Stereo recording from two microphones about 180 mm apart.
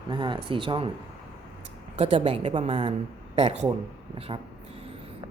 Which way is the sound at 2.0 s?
30° right (ahead or behind).